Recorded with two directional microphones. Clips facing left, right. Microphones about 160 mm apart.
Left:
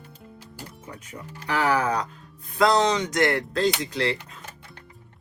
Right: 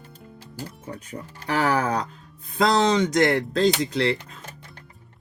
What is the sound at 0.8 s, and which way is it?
Speech, 30° right (ahead or behind).